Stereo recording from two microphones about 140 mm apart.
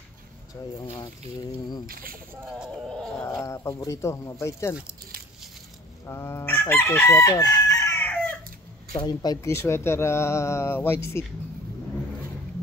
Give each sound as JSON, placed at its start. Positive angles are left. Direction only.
{"t": 0.8, "sound": "speech", "side_deg": 35}
{"t": 1.9, "sound": "speech", "side_deg": -90}
{"t": 3.3, "sound": "speech", "side_deg": 20}
{"t": 6.0, "sound": "chicken", "side_deg": 15}
{"t": 9.0, "sound": "speech", "side_deg": 25}